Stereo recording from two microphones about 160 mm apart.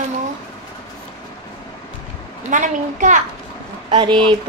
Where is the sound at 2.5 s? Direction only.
50° right (ahead or behind).